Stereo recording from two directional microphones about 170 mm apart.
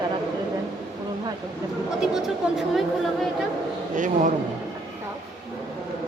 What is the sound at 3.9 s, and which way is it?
Speech, 50° right (ahead or behind).